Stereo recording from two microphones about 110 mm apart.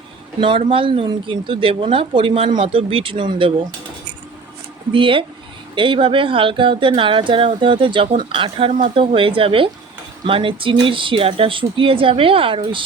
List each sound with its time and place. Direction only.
0.3 s speech: 50° right (ahead or behind)
4.9 s speech: 50° right (ahead or behind)